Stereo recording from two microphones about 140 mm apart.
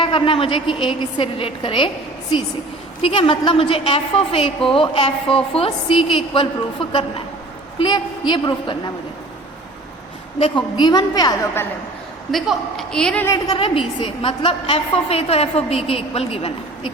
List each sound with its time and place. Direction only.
0.0 s a woman's voice: 40° left (ahead or behind)
3.0 s a woman's voice: 40° left (ahead or behind)
7.8 s a woman's voice: 30° left (ahead or behind)
10.4 s a woman's voice: 30° left (ahead or behind)
12.3 s a man's voice: centre (ahead or behind)
13.2 s a woman's voice: 25° left (ahead or behind)
13.6 s a woman's voice: 40° left (ahead or behind)